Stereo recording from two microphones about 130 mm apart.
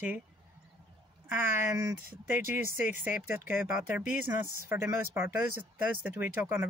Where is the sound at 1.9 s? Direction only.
15° right (ahead or behind).